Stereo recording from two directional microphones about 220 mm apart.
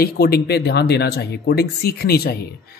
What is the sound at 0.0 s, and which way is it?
Speech, 45° left (ahead or behind).